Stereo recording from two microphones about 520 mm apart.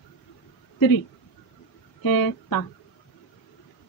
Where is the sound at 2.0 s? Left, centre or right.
Left.